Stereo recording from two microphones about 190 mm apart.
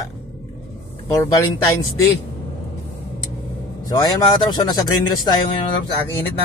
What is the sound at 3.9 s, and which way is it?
A man's voice, 20° left (ahead or behind).